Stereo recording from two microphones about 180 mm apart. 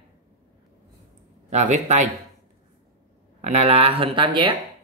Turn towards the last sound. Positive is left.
turn(degrees=-25)  # may be behind; listen again after turning